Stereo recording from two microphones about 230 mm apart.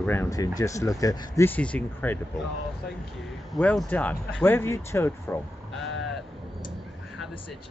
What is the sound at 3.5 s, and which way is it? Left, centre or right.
Speech, centre.